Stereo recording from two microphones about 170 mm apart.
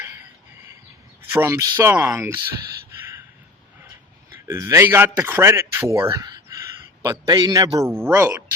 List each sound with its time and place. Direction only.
1.3 s a man's voice: 15° right (ahead or behind)
4.4 s a man's voice: 15° right (ahead or behind)